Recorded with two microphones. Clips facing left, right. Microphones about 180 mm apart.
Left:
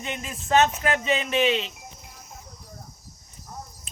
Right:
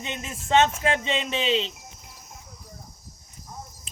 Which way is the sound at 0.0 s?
20° right (ahead or behind).